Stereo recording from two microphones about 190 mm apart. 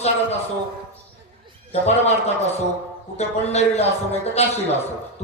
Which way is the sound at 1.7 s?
35° left (ahead or behind).